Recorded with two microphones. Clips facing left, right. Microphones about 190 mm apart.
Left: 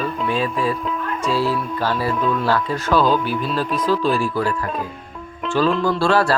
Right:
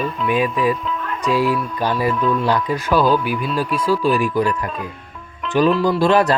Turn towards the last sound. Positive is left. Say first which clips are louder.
# right 2 dB
turn(degrees=-20)  # may be behind; listen again after turning